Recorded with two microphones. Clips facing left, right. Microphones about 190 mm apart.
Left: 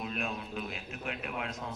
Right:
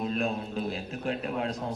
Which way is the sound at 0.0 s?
35° right (ahead or behind).